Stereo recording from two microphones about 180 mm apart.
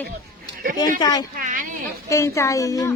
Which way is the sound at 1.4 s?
50° right (ahead or behind).